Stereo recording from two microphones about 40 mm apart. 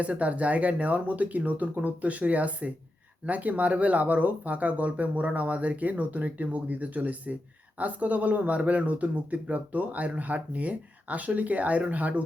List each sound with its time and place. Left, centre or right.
0.0 s speech: right